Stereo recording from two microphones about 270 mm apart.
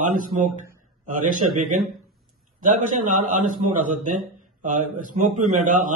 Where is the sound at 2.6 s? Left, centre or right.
Right.